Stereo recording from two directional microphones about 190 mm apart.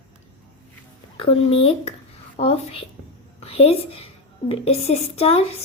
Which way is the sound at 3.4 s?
30° left (ahead or behind).